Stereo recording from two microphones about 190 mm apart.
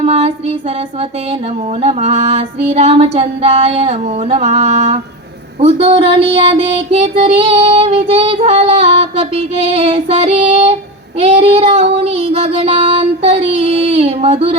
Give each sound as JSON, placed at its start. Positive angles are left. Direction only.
{"t": 0.0, "sound": "music", "side_deg": -30}
{"t": 1.8, "sound": "music", "side_deg": -35}